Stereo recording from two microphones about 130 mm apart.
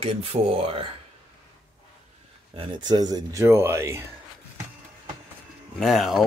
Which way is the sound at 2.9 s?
30° right (ahead or behind).